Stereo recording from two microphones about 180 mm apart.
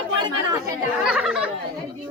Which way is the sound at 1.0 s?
5° right (ahead or behind).